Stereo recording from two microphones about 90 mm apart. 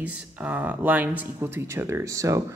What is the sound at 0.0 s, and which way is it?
Speech, 15° right (ahead or behind).